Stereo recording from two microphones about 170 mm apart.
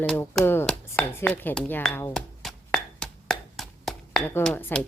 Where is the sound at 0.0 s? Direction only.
5° left (ahead or behind).